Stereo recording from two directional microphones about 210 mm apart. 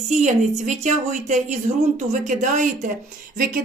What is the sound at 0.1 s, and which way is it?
A woman's voice, 35° right (ahead or behind).